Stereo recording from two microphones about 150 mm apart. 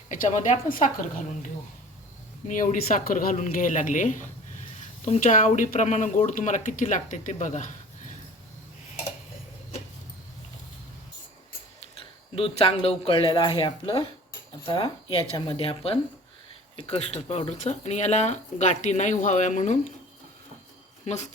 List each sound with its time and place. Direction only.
0.1 s speech: 55° left (ahead or behind)
2.5 s speech: 65° left (ahead or behind)
12.3 s speech: 40° left (ahead or behind)
21.0 s speech: 50° left (ahead or behind)